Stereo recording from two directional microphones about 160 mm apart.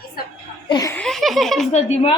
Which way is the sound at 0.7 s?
25° left (ahead or behind).